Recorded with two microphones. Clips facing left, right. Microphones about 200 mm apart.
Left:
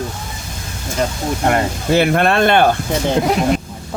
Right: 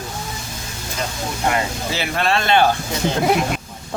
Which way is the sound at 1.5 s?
55° left (ahead or behind).